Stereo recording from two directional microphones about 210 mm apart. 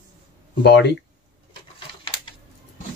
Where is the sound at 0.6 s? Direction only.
55° left (ahead or behind).